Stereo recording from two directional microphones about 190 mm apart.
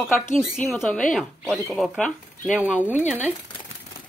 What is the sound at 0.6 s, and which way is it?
Speech, 5° left (ahead or behind).